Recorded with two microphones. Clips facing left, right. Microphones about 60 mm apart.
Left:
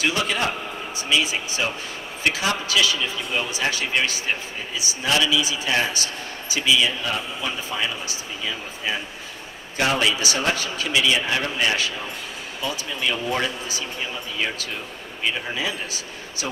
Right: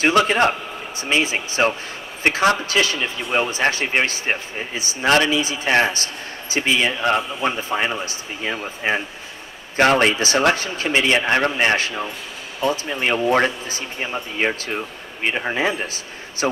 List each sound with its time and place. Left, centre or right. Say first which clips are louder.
0.3 s a man's voice: right 6 dB; right